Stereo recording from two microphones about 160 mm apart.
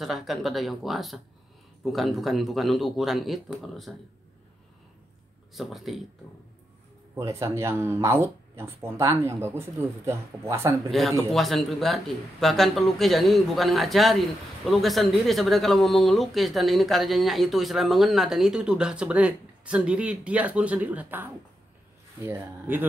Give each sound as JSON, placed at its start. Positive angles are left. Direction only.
{"t": 0.0, "sound": "speech", "side_deg": 0}
{"t": 5.5, "sound": "speech", "side_deg": 0}
{"t": 7.2, "sound": "speech", "side_deg": -20}
{"t": 10.9, "sound": "speech", "side_deg": 0}